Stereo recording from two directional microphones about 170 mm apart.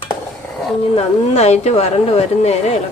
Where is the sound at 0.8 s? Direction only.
35° left (ahead or behind).